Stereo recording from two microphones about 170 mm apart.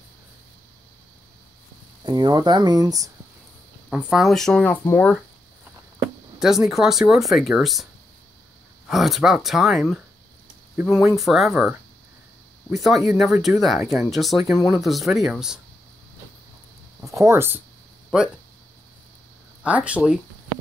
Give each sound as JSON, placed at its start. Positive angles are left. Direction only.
{"t": 2.0, "sound": "speech", "side_deg": -25}
{"t": 4.1, "sound": "speech", "side_deg": 0}
{"t": 6.4, "sound": "speech", "side_deg": 0}
{"t": 8.8, "sound": "speech", "side_deg": 0}
{"t": 12.7, "sound": "speech", "side_deg": 0}
{"t": 17.0, "sound": "speech", "side_deg": -15}
{"t": 19.6, "sound": "speech", "side_deg": -5}